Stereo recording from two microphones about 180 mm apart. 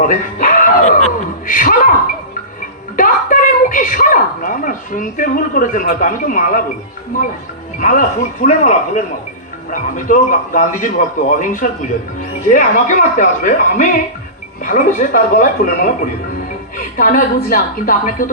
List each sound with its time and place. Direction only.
0.0 s speech: 45° left (ahead or behind)
2.9 s speech: 50° left (ahead or behind)
7.8 s speech: 45° left (ahead or behind)